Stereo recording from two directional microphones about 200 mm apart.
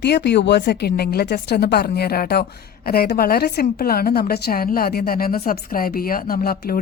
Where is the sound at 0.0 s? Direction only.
55° left (ahead or behind).